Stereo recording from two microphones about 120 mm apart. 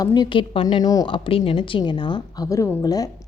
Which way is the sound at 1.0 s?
45° left (ahead or behind).